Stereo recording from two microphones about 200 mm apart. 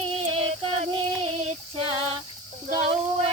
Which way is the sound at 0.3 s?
30° right (ahead or behind).